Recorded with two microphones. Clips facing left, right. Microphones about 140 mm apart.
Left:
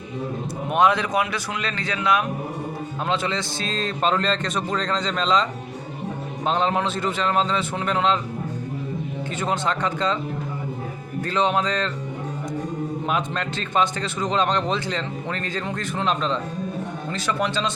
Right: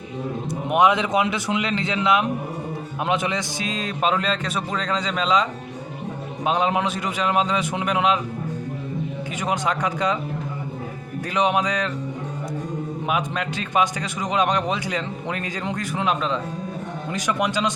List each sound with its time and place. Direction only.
0.7 s speech: 20° right (ahead or behind)
9.4 s speech: 15° right (ahead or behind)
11.3 s speech: 15° right (ahead or behind)
13.1 s speech: 10° right (ahead or behind)